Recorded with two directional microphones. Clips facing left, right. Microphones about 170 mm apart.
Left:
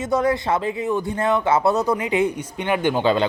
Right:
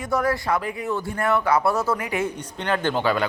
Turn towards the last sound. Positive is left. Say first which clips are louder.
# left 4 dB
turn(degrees=20)  # may be behind; listen again after turning